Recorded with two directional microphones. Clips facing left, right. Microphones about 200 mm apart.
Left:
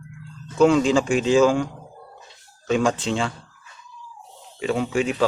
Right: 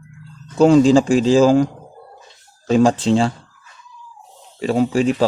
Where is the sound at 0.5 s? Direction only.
35° right (ahead or behind).